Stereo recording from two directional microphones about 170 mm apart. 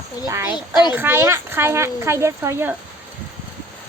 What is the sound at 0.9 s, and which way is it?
Speech, 15° right (ahead or behind).